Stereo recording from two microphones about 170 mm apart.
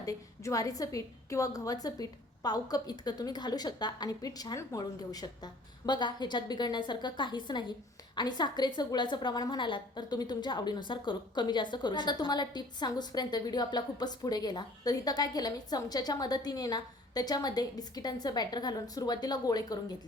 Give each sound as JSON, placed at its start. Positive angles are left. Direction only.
{"t": 0.0, "sound": "a woman's voice", "side_deg": 20}